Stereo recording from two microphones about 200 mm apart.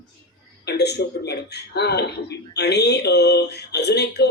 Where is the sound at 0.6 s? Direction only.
55° left (ahead or behind).